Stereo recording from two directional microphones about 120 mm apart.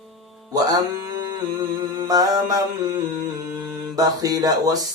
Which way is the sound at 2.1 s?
30° right (ahead or behind).